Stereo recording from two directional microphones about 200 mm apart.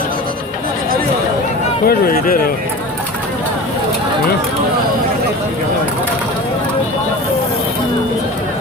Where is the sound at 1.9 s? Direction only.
45° left (ahead or behind).